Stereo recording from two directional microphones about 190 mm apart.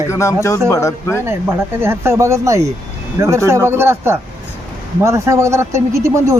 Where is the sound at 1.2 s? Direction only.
10° right (ahead or behind).